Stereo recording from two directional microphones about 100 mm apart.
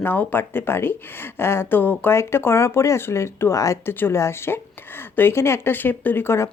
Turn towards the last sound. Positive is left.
turn(degrees=25)  # may be behind; listen again after turning